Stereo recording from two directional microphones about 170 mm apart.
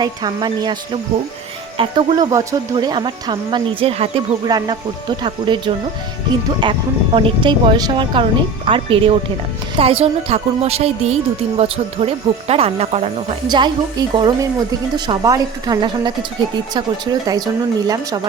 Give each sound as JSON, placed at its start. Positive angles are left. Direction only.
{"t": 0.0, "sound": "speech", "side_deg": -25}
{"t": 1.8, "sound": "a woman's voice", "side_deg": -25}